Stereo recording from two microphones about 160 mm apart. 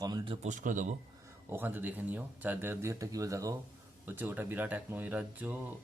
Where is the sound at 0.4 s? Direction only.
50° right (ahead or behind).